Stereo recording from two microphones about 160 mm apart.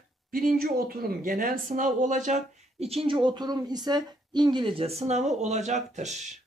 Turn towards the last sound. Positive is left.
turn(degrees=-45)  # may be behind; listen again after turning